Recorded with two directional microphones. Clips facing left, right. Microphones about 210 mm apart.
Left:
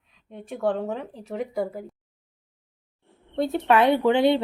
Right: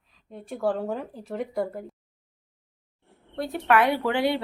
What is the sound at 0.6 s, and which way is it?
Speech, 5° right (ahead or behind).